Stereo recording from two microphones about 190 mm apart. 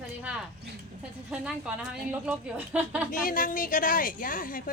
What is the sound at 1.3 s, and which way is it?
A woman's voice, 5° right (ahead or behind).